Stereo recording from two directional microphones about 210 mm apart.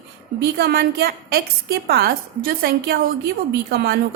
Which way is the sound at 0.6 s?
50° right (ahead or behind).